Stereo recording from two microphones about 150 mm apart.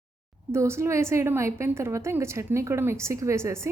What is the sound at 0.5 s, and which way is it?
A woman's voice, 20° right (ahead or behind).